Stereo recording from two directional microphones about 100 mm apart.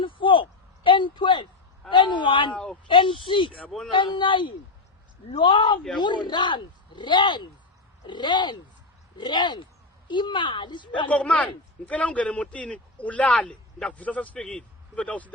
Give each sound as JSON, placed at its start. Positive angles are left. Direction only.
{"t": 0.0, "sound": "a sound", "side_deg": 55}
{"t": 0.9, "sound": "a woman's voice", "side_deg": 55}
{"t": 11.1, "sound": "a man's voice", "side_deg": 10}